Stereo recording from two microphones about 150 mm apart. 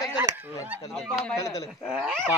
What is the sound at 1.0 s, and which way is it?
Speech, centre (ahead or behind).